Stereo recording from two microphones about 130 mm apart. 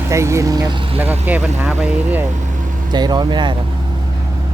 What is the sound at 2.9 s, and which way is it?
Speech, 30° right (ahead or behind).